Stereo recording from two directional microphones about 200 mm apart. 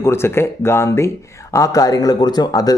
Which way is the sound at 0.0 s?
10° left (ahead or behind).